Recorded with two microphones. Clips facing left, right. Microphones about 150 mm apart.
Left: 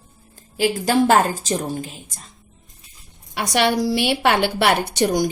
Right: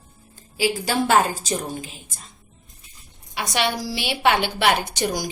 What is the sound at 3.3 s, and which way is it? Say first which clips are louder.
A woman's voice: left 5 dB; 55° left (ahead or behind).